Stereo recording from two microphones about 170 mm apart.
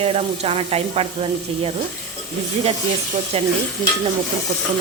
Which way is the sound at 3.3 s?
35° right (ahead or behind).